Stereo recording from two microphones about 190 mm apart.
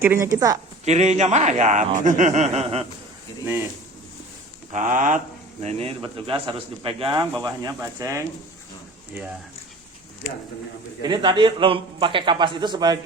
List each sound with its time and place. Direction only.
0.0 s a woman's voice: 15° right (ahead or behind)
0.9 s a man's voice: 35° right (ahead or behind)
4.7 s a man's voice: 40° right (ahead or behind)
5.6 s speech: 30° right (ahead or behind)
11.0 s speech: 25° right (ahead or behind)